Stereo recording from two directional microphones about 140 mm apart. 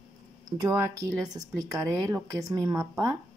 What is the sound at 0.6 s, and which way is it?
Speech, 25° right (ahead or behind).